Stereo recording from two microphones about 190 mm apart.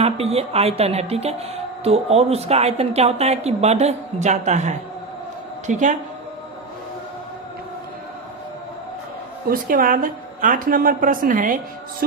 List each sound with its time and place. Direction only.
0.0 s a woman's voice: 30° right (ahead or behind)
9.5 s a woman's voice: 50° right (ahead or behind)